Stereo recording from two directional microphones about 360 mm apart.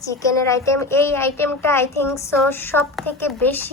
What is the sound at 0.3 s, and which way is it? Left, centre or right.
A child's voice, centre.